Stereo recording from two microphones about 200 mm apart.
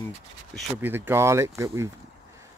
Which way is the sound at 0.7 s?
10° right (ahead or behind).